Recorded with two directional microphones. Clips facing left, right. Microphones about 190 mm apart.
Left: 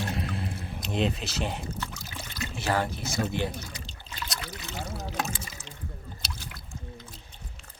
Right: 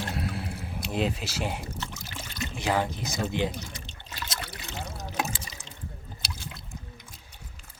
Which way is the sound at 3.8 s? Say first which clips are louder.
Even; 40° right (ahead or behind).